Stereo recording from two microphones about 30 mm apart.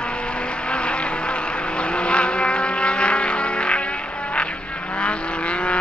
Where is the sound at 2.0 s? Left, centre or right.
Left.